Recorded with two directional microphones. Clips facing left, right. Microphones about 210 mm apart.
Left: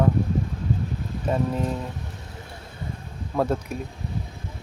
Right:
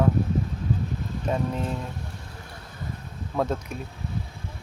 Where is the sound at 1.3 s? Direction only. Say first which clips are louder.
Left 3 dB; 5° left (ahead or behind).